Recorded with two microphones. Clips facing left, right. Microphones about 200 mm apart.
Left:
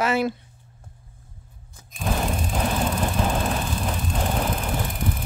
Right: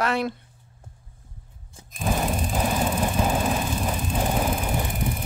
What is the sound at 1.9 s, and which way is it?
Vehicle, centre (ahead or behind).